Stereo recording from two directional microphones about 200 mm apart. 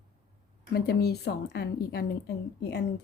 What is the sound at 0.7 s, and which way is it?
Speech, 55° left (ahead or behind).